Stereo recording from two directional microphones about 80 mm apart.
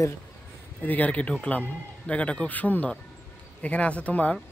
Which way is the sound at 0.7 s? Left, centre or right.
Left.